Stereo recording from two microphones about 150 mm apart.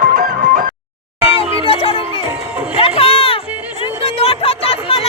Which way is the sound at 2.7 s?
40° left (ahead or behind).